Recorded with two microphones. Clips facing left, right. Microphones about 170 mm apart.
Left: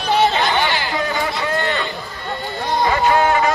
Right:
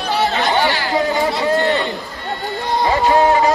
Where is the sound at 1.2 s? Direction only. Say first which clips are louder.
Right 5 dB; 35° right (ahead or behind).